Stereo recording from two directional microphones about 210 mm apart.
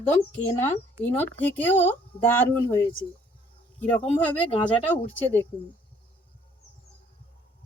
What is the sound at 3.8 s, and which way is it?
Speech, 5° left (ahead or behind).